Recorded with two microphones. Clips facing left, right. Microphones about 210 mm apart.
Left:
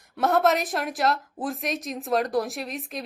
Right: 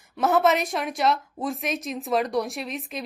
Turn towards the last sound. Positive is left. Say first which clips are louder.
# right 1 dB
turn(degrees=0)  # may be behind; listen again after turning